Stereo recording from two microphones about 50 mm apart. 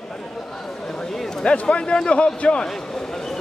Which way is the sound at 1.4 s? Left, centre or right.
Left.